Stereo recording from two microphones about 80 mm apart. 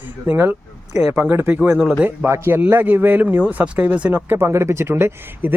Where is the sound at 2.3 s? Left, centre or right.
Right.